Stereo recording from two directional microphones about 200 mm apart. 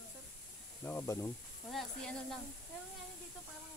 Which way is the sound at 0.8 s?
15° left (ahead or behind).